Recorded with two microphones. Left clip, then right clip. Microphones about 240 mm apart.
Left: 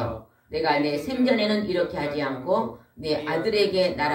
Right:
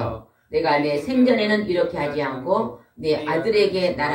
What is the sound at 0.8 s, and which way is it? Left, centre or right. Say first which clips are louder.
Speech: right 4 dB; left.